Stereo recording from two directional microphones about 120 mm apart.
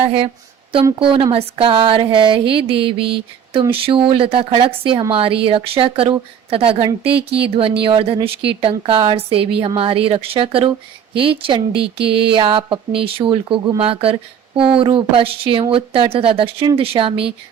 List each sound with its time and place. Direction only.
0.9 s a woman's voice: 50° right (ahead or behind)